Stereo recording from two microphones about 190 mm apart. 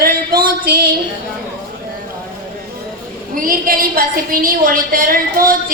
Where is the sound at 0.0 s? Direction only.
50° right (ahead or behind).